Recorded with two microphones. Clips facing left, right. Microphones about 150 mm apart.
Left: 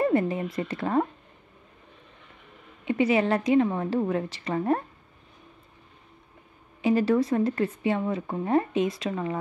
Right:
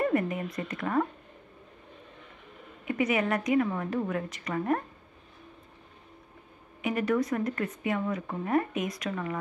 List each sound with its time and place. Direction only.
0.0 s speech: 30° left (ahead or behind)
2.8 s speech: 30° left (ahead or behind)
6.8 s speech: 30° left (ahead or behind)